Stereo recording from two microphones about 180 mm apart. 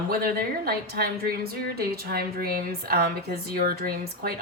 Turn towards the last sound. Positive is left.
turn(degrees=-55)  # may be behind; listen again after turning